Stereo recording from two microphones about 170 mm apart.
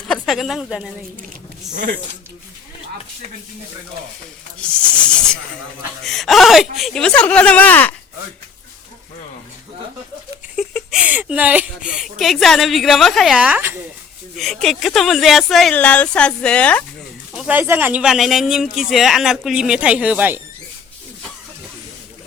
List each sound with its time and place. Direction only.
0.1 s speech: centre (ahead or behind)
1.7 s speech: 50° right (ahead or behind)
4.6 s snake: 5° left (ahead or behind)
6.0 s speech: centre (ahead or behind)
10.6 s speech: 5° right (ahead or behind)
14.3 s speech: centre (ahead or behind)
17.3 s speech: 10° right (ahead or behind)